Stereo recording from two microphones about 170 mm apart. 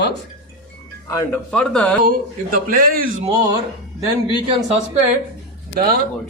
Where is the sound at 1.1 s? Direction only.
15° left (ahead or behind).